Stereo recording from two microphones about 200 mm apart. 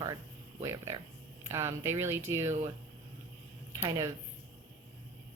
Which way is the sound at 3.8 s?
15° right (ahead or behind).